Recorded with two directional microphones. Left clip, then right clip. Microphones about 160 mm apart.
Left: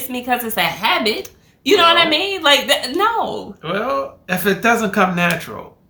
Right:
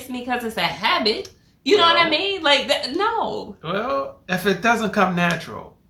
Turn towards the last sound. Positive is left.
turn(degrees=0)  # may be behind; listen again after turning